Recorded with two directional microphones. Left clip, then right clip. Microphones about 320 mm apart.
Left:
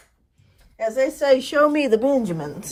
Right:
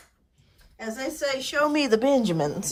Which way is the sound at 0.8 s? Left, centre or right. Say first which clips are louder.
Left 10 dB; centre.